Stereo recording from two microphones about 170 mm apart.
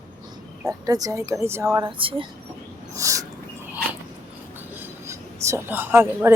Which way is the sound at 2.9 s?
20° right (ahead or behind).